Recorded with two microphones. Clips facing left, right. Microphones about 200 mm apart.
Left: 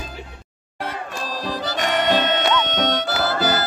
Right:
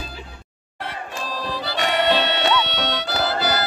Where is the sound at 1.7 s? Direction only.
45° left (ahead or behind).